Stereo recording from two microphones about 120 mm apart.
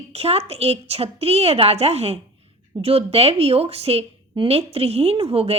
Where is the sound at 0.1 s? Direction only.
55° right (ahead or behind).